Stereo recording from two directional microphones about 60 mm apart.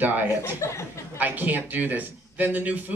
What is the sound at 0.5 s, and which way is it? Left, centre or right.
Speech, left.